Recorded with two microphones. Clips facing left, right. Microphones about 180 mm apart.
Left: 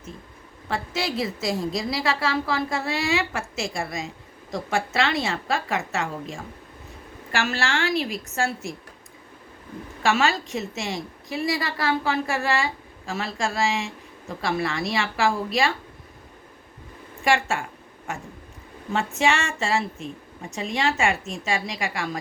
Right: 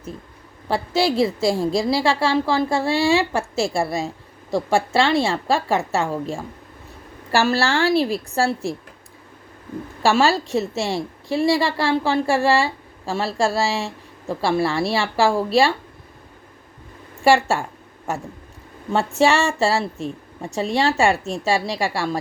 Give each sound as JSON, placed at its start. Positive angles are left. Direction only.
{"t": 0.7, "sound": "a woman's voice", "side_deg": -30}
{"t": 10.0, "sound": "a woman's voice", "side_deg": -35}
{"t": 17.2, "sound": "a woman's voice", "side_deg": -35}
{"t": 18.9, "sound": "a woman's voice", "side_deg": -35}